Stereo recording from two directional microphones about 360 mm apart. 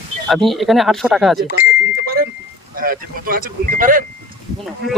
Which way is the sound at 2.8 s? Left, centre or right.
Right.